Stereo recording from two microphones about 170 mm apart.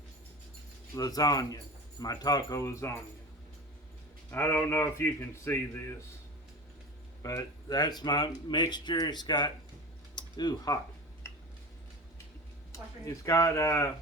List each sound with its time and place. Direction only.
0.9 s speech: 20° left (ahead or behind)
4.3 s a man's voice: 15° left (ahead or behind)
7.2 s speech: 20° left (ahead or behind)
12.7 s speech: 20° left (ahead or behind)